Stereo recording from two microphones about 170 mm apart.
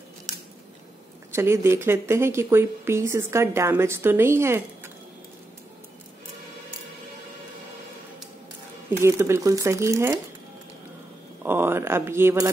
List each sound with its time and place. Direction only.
1.3 s speech: 15° right (ahead or behind)
8.9 s speech: 15° right (ahead or behind)
11.4 s speech: 15° right (ahead or behind)